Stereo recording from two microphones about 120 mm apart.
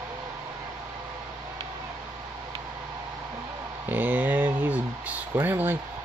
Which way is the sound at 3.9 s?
15° right (ahead or behind).